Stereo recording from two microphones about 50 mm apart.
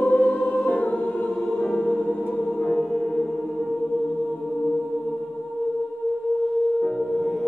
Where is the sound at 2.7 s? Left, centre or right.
Centre.